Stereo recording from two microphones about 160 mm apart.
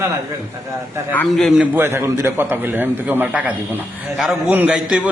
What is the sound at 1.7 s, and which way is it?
A man's voice, 15° right (ahead or behind).